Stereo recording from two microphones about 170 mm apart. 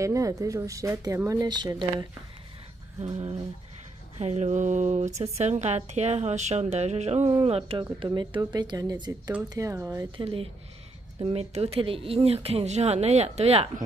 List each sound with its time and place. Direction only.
0.0 s a woman's voice: 20° right (ahead or behind)
3.0 s speech: 40° right (ahead or behind); by 10.0 s 15° right (ahead or behind)
10.1 s speech: 35° right (ahead or behind)